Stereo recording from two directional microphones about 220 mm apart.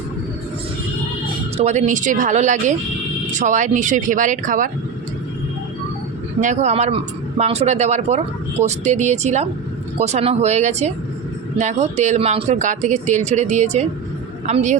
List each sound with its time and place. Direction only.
1.5 s speech: 30° right (ahead or behind)
6.4 s speech: 30° right (ahead or behind)